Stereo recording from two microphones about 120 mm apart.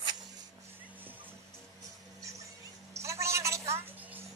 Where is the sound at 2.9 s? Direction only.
25° right (ahead or behind).